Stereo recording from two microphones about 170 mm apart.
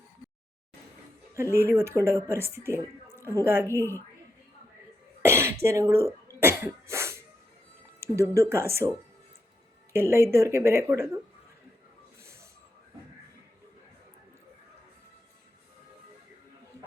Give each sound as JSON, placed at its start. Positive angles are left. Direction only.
{"t": 1.5, "sound": "speech", "side_deg": -15}
{"t": 5.2, "sound": "cough", "side_deg": -15}
{"t": 5.6, "sound": "speech", "side_deg": -15}
{"t": 6.4, "sound": "cough", "side_deg": -15}
{"t": 8.0, "sound": "speech", "side_deg": -15}
{"t": 9.9, "sound": "speech", "side_deg": -15}